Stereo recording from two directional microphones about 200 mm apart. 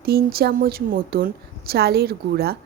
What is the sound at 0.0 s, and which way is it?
A woman's voice, 50° right (ahead or behind).